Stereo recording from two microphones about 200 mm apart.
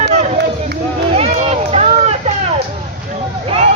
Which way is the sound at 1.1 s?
30° right (ahead or behind).